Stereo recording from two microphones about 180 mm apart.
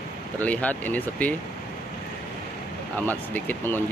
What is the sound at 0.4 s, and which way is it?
Speech, 10° left (ahead or behind).